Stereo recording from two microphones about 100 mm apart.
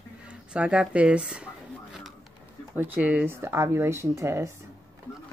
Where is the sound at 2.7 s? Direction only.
20° right (ahead or behind).